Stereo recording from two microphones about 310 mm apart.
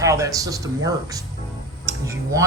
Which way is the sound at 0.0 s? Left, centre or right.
Centre.